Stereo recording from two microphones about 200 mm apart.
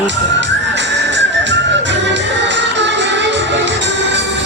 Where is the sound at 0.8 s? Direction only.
65° right (ahead or behind).